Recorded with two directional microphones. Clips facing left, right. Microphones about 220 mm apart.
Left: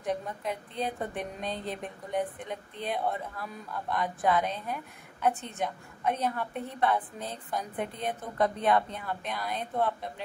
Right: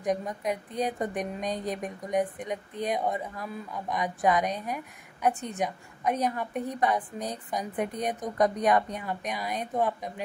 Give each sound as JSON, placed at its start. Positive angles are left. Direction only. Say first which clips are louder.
{"t": 0.0, "sound": "a woman's voice", "louder": "right 4 dB", "side_deg": -15}